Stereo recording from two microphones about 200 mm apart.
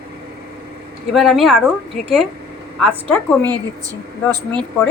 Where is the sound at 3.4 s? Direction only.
20° right (ahead or behind).